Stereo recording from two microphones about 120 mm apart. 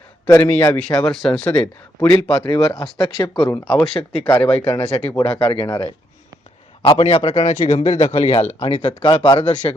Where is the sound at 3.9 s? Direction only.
55° left (ahead or behind).